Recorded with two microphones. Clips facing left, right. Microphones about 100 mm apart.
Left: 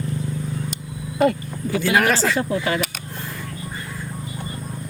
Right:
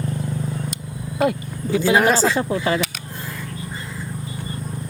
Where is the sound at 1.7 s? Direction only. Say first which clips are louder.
Right 3 dB; 20° right (ahead or behind).